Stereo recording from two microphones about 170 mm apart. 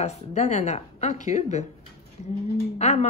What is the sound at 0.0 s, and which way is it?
Speech, 40° left (ahead or behind).